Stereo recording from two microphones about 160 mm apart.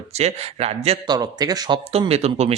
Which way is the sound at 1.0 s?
25° right (ahead or behind).